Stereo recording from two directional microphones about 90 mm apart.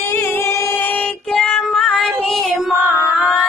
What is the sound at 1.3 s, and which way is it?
Child singing, 5° left (ahead or behind).